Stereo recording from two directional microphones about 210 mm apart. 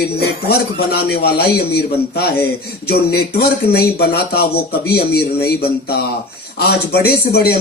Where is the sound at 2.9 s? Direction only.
50° left (ahead or behind).